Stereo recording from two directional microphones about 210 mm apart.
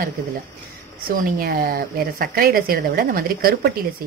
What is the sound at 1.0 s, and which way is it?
A woman's voice, 45° right (ahead or behind).